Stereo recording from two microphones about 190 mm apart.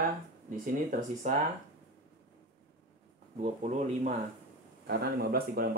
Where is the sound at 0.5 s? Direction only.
45° right (ahead or behind).